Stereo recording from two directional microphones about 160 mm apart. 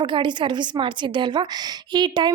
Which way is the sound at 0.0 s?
30° right (ahead or behind).